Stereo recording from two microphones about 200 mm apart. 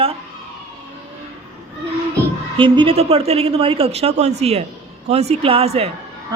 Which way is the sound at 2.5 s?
25° right (ahead or behind).